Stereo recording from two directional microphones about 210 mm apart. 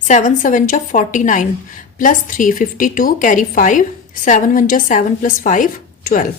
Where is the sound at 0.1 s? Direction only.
40° left (ahead or behind).